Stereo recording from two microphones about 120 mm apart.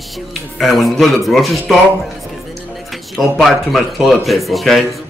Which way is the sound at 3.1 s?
Centre (ahead or behind).